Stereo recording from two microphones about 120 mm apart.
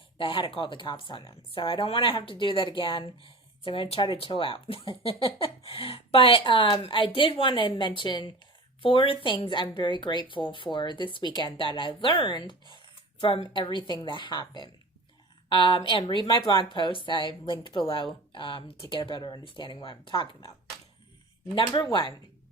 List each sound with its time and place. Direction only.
0.2 s speech: 45° left (ahead or behind)
21.5 s speech: 40° left (ahead or behind)